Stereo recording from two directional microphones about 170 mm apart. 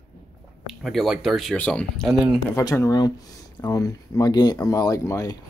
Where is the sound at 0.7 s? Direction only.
Centre (ahead or behind).